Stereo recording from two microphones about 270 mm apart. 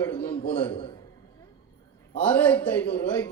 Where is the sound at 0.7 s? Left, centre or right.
Centre.